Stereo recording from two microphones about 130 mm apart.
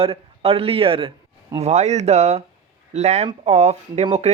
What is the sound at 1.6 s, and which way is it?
Speech, 60° right (ahead or behind).